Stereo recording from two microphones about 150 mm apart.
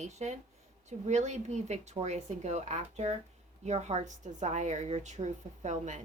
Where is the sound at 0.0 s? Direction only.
50° right (ahead or behind).